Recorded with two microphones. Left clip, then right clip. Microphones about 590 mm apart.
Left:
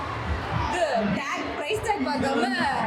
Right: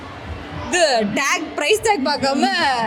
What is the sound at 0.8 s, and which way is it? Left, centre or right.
A woman's voice, right.